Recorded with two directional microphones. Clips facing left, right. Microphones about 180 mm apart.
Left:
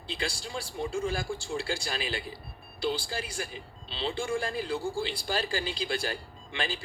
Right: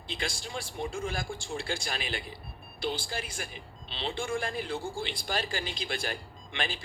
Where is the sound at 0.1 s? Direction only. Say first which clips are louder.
Left 2 dB; 35° left (ahead or behind).